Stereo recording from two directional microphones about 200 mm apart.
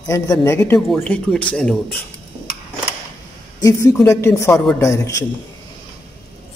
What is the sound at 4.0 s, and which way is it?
Speech, 15° left (ahead or behind).